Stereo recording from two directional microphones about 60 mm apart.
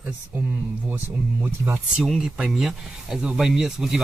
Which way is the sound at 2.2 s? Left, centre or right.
Centre.